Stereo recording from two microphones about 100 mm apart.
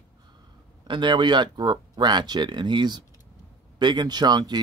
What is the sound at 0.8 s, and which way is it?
A man's voice, 50° right (ahead or behind).